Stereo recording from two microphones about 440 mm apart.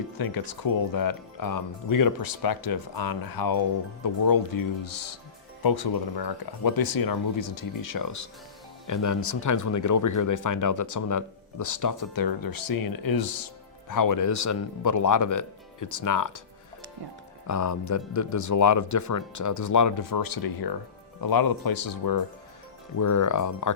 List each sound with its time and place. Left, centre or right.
0.2 s speech: left
17.4 s speech: left